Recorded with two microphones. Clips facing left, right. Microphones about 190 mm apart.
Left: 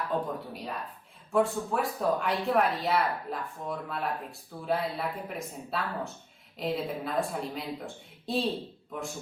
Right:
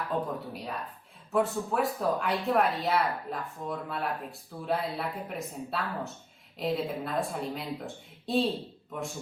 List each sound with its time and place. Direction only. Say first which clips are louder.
0.1 s speech: left 1 dB; centre (ahead or behind)
1.3 s speech: left 1 dB; centre (ahead or behind)